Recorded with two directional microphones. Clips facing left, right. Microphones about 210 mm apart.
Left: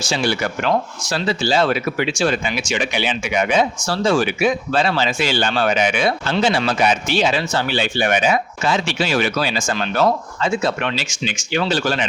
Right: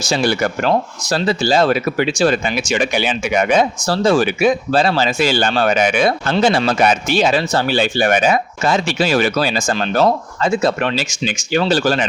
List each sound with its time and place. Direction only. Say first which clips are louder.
0.1 s speech: right 4 dB; 45° right (ahead or behind)